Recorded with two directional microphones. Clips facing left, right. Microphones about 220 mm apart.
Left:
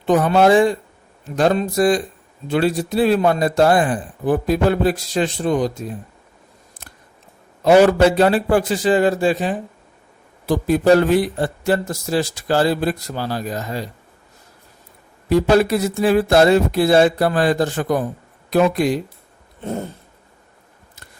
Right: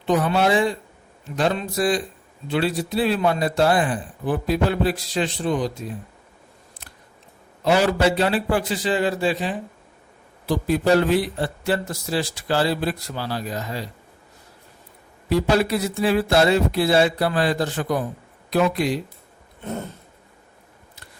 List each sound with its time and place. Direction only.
0.0 s a man's voice: 50° left (ahead or behind)
6.8 s scissors: 45° left (ahead or behind)
7.6 s a man's voice: 45° left (ahead or behind)
15.3 s a man's voice: 45° left (ahead or behind)